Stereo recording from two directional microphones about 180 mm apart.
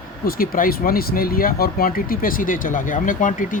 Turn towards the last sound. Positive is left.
turn(degrees=50)  # may be behind; listen again after turning